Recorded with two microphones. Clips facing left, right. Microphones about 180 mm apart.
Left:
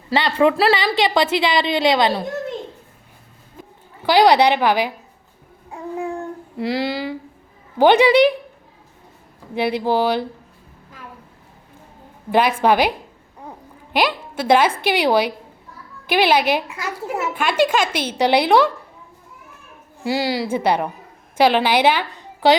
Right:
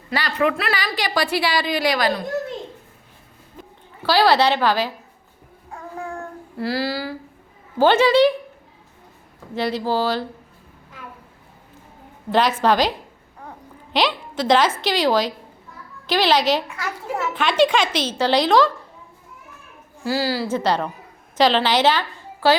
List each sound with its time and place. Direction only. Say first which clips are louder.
0.1 s a woman's voice: left 5 dB; 25° left (ahead or behind)
4.0 s a child's voice: left 3 dB; 15° left (ahead or behind)
6.6 s a woman's voice: left 2 dB; 20° left (ahead or behind)
9.6 s a child's voice: left 3 dB; 15° left (ahead or behind)
12.3 s a child's voice: left 2 dB; 10° left (ahead or behind)
13.9 s a woman's voice: left 1 dB; 10° left (ahead or behind)
20.1 s a child's voice: left 1 dB; 15° left (ahead or behind)